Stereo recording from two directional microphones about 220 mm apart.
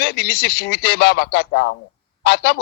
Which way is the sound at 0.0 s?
45° left (ahead or behind).